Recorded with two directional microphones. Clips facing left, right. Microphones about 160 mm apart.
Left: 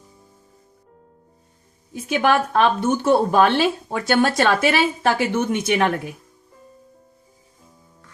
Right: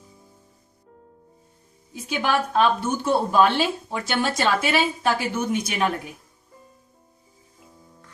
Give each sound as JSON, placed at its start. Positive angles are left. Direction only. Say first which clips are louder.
{"t": 2.2, "sound": "speech", "louder": "left 3 dB", "side_deg": 60}